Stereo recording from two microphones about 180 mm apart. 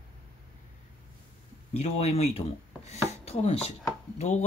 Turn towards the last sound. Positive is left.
turn(degrees=40)  # may be behind; listen again after turning